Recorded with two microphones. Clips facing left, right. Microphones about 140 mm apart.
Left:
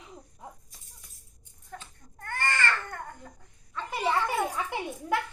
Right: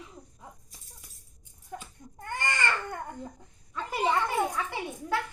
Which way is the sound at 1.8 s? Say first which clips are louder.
Right 2 dB; 15° right (ahead or behind).